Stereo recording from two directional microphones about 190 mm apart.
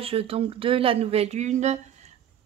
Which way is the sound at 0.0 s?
30° right (ahead or behind).